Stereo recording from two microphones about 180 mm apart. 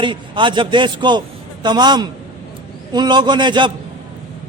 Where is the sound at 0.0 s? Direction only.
25° right (ahead or behind).